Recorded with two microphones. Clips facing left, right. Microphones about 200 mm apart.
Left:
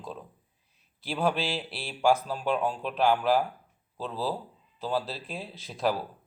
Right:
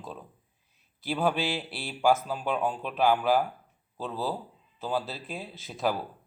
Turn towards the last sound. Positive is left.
turn(degrees=0)  # may be behind; listen again after turning